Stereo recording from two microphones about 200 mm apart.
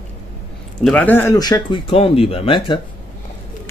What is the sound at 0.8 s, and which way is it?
Speech, 10° left (ahead or behind).